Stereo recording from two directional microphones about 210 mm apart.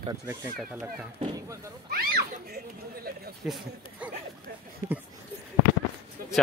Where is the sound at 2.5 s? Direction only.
45° right (ahead or behind).